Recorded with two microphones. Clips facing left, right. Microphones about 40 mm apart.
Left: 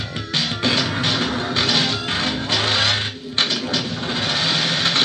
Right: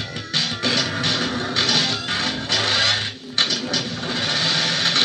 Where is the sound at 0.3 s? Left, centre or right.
Left.